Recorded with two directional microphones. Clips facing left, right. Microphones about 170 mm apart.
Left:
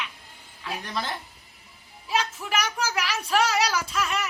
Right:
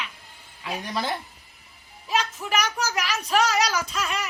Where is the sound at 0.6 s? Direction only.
10° right (ahead or behind).